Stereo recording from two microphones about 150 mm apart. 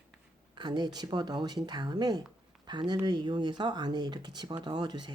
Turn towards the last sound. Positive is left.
turn(degrees=-30)  # may be behind; listen again after turning